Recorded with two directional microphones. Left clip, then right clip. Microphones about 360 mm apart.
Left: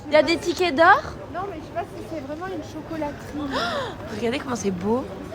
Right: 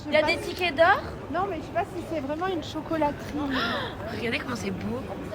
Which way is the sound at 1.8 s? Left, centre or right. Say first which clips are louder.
Right 2 dB; right.